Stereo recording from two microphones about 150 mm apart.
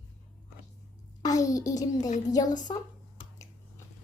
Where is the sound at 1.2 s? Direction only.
25° left (ahead or behind).